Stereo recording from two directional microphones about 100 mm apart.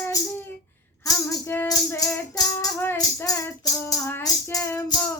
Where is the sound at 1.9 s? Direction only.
35° left (ahead or behind).